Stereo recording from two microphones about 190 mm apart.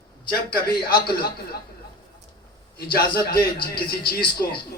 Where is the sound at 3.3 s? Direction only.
50° left (ahead or behind).